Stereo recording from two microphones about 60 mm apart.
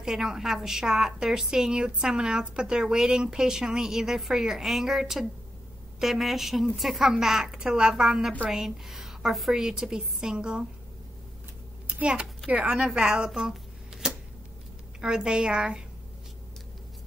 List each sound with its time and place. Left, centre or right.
0.0 s a woman's voice: centre
11.9 s a child's voice: centre
15.0 s a woman's voice: centre